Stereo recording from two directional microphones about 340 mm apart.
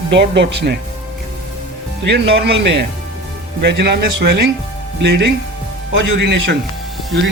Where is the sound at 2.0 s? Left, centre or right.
Right.